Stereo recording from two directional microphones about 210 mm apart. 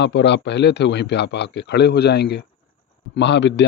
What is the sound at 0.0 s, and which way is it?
Speech, 55° left (ahead or behind).